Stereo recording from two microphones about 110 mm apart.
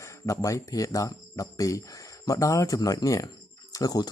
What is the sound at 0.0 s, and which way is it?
Speech, 30° left (ahead or behind).